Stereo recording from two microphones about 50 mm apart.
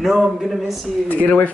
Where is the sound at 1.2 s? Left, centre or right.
Left.